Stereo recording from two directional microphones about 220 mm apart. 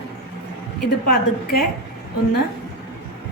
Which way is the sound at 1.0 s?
45° left (ahead or behind).